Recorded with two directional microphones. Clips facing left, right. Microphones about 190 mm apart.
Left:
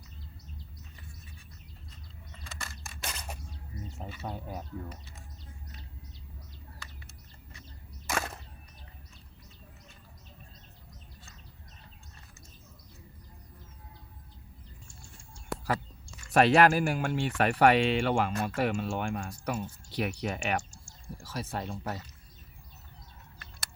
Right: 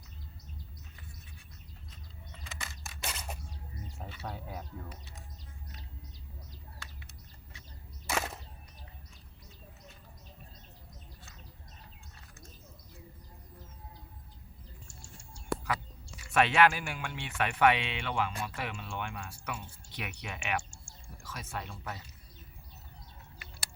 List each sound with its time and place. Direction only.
2.4 s a sound: 5° right (ahead or behind)
4.0 s speech: 10° left (ahead or behind)
8.1 s whip: 5° right (ahead or behind)
16.3 s speech: 40° left (ahead or behind)